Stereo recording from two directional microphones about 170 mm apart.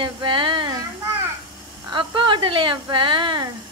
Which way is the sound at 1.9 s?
30° right (ahead or behind).